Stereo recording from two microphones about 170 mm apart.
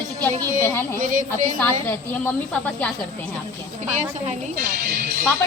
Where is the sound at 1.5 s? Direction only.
10° left (ahead or behind).